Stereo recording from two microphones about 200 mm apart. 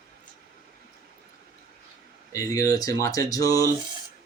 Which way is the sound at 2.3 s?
15° left (ahead or behind).